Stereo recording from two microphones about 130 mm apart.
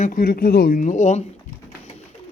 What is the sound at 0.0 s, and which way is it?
Speech, 90° left.